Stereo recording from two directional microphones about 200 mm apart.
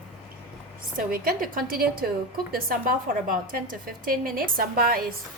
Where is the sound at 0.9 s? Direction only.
45° right (ahead or behind).